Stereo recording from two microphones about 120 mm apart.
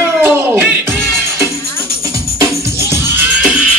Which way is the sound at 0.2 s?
15° right (ahead or behind).